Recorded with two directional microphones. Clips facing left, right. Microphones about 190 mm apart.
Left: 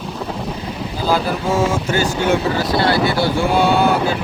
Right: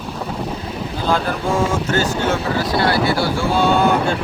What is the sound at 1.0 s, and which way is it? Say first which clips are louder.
Speech: left 1 dB; 5° left (ahead or behind).